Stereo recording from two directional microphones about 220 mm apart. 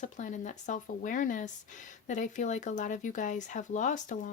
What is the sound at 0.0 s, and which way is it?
Speech, 35° left (ahead or behind).